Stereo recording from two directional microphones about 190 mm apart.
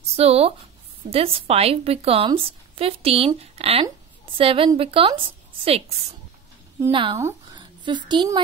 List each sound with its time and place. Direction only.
0.1 s a woman's voice: 30° right (ahead or behind)